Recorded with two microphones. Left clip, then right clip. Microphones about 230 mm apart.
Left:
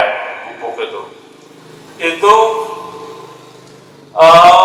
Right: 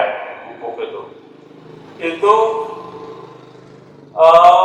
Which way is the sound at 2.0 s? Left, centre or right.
Centre.